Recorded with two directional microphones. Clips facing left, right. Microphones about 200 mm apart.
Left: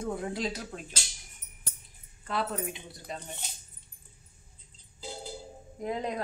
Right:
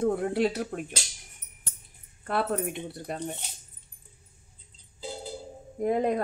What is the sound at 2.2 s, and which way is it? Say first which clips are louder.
Speech: right 5 dB; 55° right (ahead or behind).